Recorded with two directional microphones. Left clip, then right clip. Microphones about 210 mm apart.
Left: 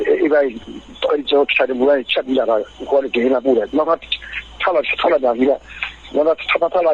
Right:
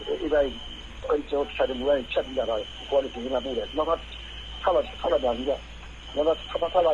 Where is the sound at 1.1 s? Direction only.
70° left (ahead or behind).